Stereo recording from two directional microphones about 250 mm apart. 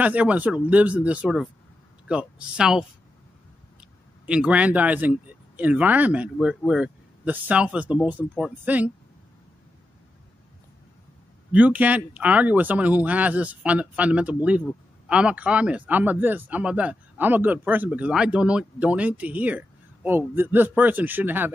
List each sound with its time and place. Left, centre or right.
0.0 s speech: centre
4.3 s speech: centre
11.5 s a man's voice: centre